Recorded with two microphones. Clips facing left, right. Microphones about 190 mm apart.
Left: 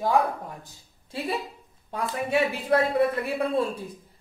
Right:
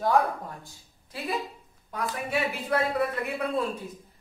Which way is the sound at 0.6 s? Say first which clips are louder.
Even; 30° left (ahead or behind).